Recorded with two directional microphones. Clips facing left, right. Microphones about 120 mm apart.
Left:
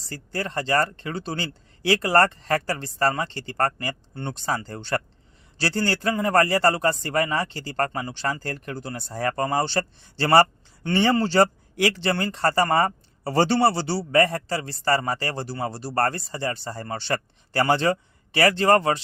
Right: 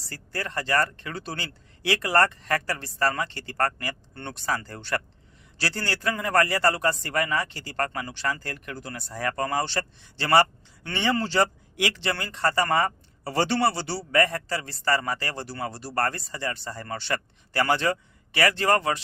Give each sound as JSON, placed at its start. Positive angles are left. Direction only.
{"t": 0.1, "sound": "a man's voice", "side_deg": 25}